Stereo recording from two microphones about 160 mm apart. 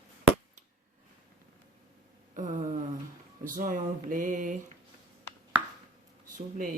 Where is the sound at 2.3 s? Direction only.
50° right (ahead or behind).